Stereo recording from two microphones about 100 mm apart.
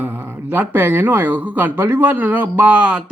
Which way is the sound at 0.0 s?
15° right (ahead or behind).